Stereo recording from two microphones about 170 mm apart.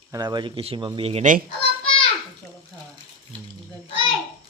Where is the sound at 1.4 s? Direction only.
35° left (ahead or behind).